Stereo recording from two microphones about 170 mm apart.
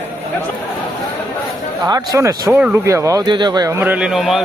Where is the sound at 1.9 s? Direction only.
15° right (ahead or behind).